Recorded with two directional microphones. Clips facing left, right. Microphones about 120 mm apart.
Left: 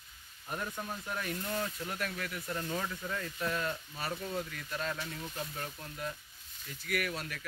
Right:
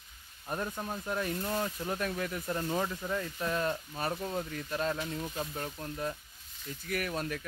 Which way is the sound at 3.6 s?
35° right (ahead or behind).